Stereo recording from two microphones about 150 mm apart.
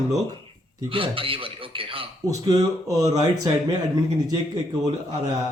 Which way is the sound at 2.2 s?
25° right (ahead or behind).